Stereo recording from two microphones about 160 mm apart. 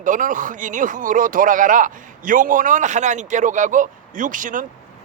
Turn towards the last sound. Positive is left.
turn(degrees=-55)  # may be behind; listen again after turning